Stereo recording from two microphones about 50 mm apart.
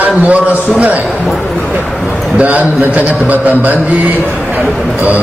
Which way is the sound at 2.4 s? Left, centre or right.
Right.